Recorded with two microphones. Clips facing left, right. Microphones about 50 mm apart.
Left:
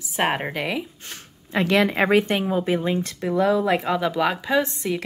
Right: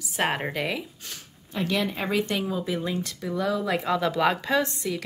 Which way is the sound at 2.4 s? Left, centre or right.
Left.